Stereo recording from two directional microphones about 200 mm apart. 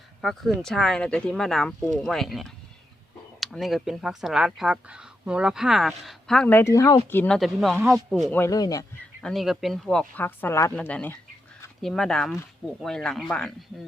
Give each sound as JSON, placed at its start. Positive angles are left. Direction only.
{"t": 0.2, "sound": "speech", "side_deg": 0}
{"t": 8.2, "sound": "speech", "side_deg": 10}
{"t": 9.2, "sound": "speech", "side_deg": 0}